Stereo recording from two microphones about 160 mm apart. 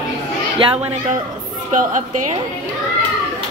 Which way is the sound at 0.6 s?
35° right (ahead or behind).